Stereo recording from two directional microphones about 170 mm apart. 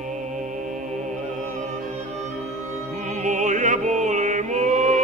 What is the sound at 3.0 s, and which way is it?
Music, 45° right (ahead or behind).